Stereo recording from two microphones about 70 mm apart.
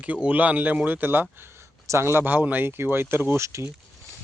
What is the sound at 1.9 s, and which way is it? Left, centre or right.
Speech, right.